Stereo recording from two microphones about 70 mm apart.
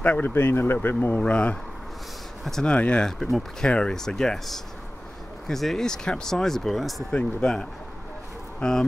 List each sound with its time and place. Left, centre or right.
0.0 s speech: left
0.3 s speech: left
1.2 s speech: centre